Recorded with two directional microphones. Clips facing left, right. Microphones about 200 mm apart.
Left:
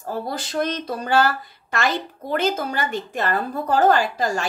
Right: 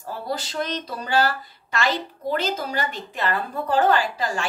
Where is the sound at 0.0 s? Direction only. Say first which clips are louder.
Left 2 dB; 50° left (ahead or behind).